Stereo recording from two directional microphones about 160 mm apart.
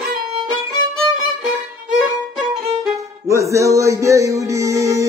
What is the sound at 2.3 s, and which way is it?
Violin, centre (ahead or behind).